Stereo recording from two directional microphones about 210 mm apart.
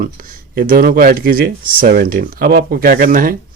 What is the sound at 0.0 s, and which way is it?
A man's voice, 45° right (ahead or behind).